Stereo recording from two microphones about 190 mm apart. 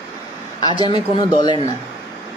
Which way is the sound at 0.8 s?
25° left (ahead or behind).